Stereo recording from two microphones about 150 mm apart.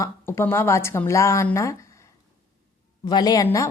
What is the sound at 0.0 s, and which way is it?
Speech, 15° left (ahead or behind).